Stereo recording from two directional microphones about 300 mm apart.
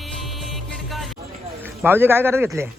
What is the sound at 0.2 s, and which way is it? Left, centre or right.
Music, centre.